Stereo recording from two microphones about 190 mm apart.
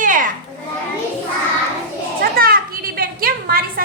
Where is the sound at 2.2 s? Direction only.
50° right (ahead or behind).